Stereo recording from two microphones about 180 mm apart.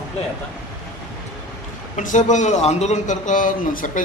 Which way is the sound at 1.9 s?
45° left (ahead or behind).